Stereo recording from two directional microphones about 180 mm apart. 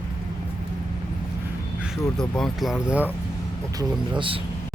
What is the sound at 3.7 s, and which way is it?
Speech, 25° right (ahead or behind).